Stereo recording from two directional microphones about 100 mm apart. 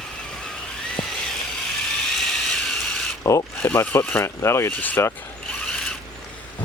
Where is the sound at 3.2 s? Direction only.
35° left (ahead or behind).